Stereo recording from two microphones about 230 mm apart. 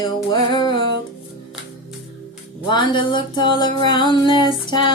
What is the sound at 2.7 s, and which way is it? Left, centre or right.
Music, centre.